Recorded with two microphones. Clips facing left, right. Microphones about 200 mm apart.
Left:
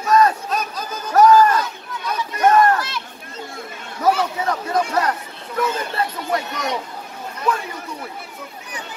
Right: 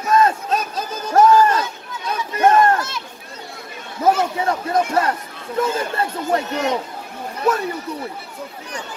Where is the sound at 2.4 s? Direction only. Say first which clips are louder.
Even; 30° right (ahead or behind).